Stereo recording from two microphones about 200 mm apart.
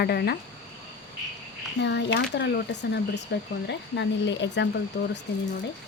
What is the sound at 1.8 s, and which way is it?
Speech, 60° left (ahead or behind).